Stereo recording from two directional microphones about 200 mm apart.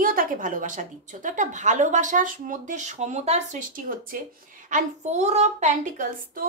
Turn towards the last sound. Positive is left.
turn(degrees=-40)  # may be behind; listen again after turning